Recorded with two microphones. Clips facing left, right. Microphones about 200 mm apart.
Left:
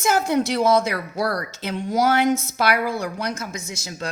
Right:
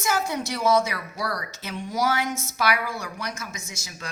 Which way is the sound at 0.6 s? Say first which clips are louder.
Left 1 dB; 30° left (ahead or behind).